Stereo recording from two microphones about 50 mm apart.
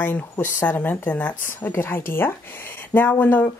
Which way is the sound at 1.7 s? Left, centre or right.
Left.